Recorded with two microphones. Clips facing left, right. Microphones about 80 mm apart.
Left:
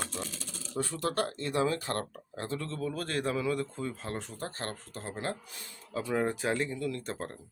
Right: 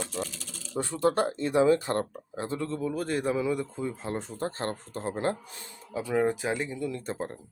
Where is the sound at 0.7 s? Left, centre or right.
Right.